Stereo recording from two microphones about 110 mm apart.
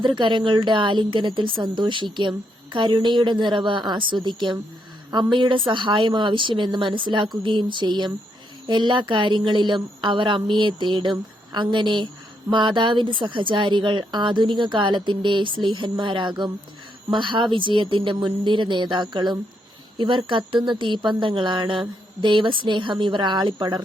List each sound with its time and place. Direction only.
0.0 s speech: 45° right (ahead or behind)